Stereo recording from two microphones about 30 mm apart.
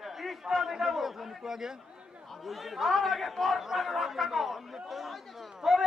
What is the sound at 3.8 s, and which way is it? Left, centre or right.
Chatter, centre.